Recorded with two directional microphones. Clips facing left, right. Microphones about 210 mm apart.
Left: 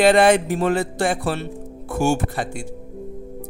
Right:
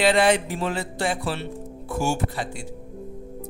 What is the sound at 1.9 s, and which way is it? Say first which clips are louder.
Speech: left 5 dB; 55° left (ahead or behind).